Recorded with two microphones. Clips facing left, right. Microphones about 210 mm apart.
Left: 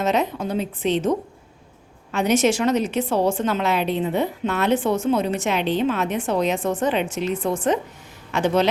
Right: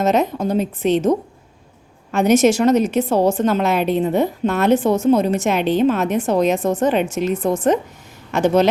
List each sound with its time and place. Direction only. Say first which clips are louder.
0.0 s a woman's voice: right 4 dB; 45° right (ahead or behind)
2.1 s a woman's voice: right 5 dB; 45° right (ahead or behind)